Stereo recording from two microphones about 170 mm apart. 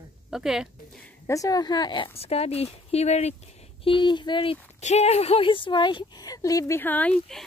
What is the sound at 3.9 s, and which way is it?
Speech, 25° left (ahead or behind).